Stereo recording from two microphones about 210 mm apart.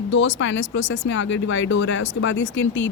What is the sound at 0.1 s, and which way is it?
Speech, 60° left (ahead or behind).